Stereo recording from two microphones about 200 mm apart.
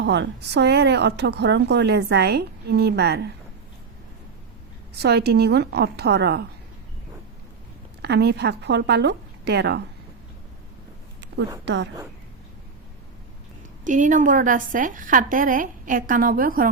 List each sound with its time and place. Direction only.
0.0 s a woman's voice: 60° right (ahead or behind)
4.9 s a woman's voice: 55° right (ahead or behind)
8.0 s a woman's voice: 55° right (ahead or behind)
11.6 s a woman's voice: 65° right (ahead or behind)
13.8 s a woman's voice: 40° right (ahead or behind)